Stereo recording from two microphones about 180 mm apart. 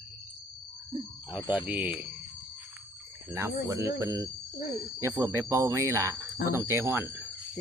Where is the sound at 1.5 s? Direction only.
5° right (ahead or behind).